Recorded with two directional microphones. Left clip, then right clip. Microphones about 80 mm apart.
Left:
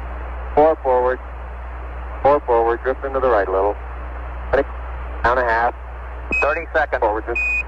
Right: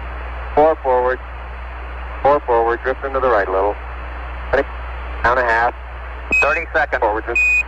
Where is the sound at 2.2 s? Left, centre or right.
Right.